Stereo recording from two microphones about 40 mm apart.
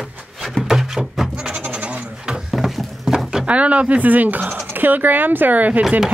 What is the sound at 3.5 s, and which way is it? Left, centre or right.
Speech, right.